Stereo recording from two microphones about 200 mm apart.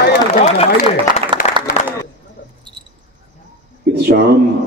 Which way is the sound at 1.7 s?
45° left (ahead or behind).